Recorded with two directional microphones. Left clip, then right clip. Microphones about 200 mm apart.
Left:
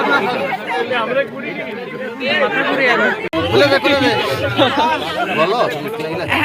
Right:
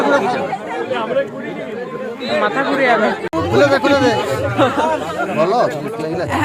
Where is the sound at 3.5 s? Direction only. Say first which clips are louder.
Even; 60° right (ahead or behind).